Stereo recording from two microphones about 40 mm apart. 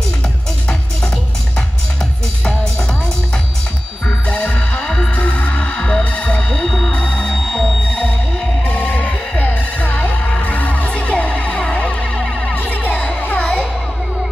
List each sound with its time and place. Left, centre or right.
4.3 s music: left
4.8 s music: centre
5.1 s music: left
7.3 s music: centre
8.6 s music: left
12.2 s music: centre
12.5 s music: left
13.4 s music: left